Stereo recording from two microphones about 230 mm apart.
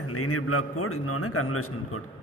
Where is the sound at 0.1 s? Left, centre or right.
Left.